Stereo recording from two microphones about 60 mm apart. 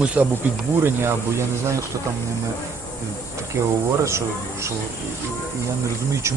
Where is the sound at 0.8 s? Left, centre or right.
Right.